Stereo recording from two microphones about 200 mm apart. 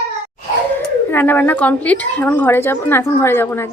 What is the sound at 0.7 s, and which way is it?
Speech, 10° left (ahead or behind).